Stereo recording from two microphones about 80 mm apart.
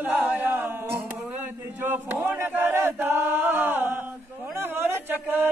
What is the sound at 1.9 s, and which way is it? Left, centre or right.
Chant, right.